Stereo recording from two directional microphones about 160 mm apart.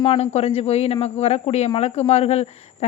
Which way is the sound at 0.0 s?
40° left (ahead or behind).